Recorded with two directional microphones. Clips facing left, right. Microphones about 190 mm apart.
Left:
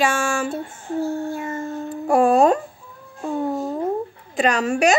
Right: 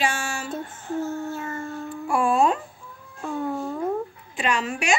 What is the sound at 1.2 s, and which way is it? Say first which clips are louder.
Howl: left 4 dB; 15° left (ahead or behind).